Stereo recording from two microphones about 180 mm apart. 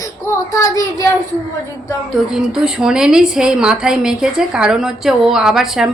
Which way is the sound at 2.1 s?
Centre (ahead or behind).